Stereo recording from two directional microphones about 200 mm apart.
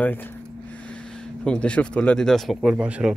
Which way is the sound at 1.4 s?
5° left (ahead or behind).